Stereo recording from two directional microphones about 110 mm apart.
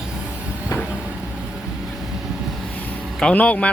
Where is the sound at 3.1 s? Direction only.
10° left (ahead or behind).